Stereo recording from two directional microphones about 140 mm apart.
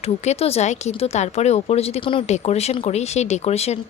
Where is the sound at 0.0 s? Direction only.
45° left (ahead or behind).